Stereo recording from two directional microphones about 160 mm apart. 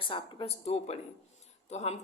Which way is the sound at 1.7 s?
45° left (ahead or behind).